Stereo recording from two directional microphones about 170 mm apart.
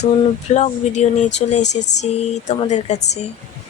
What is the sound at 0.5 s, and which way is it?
Speech, 40° left (ahead or behind).